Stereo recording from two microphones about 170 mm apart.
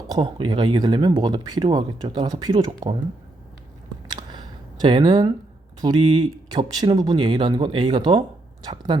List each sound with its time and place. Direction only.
0.1 s speech: 30° right (ahead or behind)
4.1 s camera: 25° right (ahead or behind)
5.8 s speech: 25° right (ahead or behind)